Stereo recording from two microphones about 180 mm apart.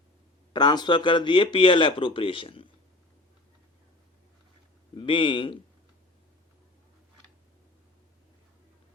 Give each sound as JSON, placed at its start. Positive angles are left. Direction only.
{"t": 0.5, "sound": "speech", "side_deg": 25}
{"t": 4.9, "sound": "speech", "side_deg": 30}